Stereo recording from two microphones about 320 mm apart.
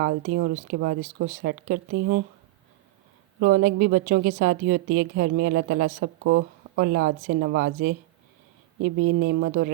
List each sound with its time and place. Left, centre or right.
0.3 s a woman's voice: right
3.4 s a woman's voice: right